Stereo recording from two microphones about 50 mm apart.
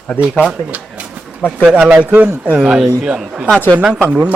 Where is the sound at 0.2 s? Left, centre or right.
Right.